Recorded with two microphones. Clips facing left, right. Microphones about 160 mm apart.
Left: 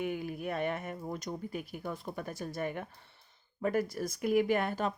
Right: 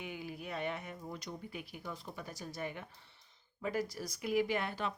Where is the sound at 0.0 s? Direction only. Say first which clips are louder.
Left 8 dB; 50° left (ahead or behind).